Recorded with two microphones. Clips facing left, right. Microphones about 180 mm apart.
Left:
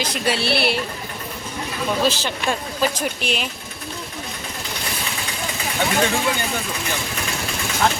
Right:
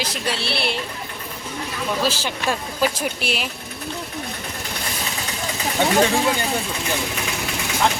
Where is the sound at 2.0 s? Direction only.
10° right (ahead or behind).